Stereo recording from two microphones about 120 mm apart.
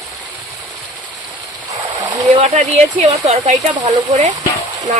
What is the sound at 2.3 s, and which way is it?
Speech, 60° right (ahead or behind).